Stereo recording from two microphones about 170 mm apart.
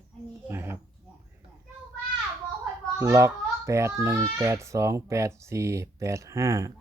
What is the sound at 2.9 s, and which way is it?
A child's voice, 20° right (ahead or behind).